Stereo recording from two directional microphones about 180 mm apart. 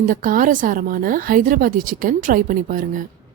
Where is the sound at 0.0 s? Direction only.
50° right (ahead or behind).